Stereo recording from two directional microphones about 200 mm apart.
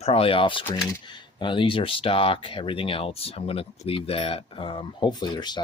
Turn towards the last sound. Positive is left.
turn(degrees=20)  # may be behind; listen again after turning